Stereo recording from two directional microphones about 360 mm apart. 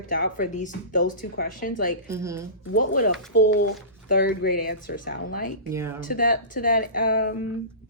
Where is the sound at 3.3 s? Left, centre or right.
Left.